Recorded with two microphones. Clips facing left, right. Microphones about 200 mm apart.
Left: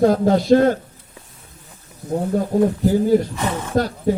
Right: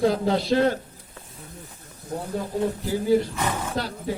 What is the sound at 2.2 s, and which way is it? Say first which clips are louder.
Speech: left 8 dB; 45° left (ahead or behind).